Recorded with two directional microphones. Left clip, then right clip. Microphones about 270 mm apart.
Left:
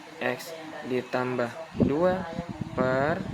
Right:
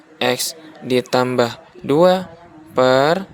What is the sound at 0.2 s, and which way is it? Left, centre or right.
Speech, right.